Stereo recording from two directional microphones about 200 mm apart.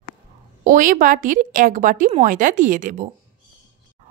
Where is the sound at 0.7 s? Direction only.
40° right (ahead or behind).